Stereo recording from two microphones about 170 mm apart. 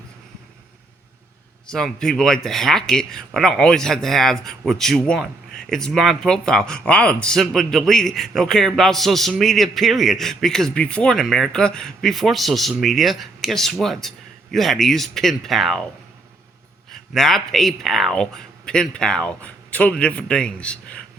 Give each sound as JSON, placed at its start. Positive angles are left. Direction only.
{"t": 1.6, "sound": "speech", "side_deg": 5}
{"t": 16.9, "sound": "speech", "side_deg": 0}